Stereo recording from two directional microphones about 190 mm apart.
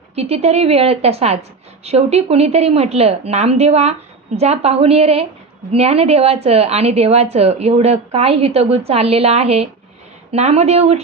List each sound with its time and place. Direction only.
0.2 s a woman's voice: 35° right (ahead or behind)